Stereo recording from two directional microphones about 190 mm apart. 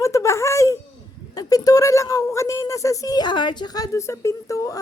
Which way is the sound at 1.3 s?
20° left (ahead or behind).